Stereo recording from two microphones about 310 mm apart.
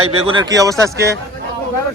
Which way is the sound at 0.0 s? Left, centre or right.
Centre.